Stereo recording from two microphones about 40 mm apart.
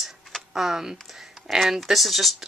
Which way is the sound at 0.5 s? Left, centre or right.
Centre.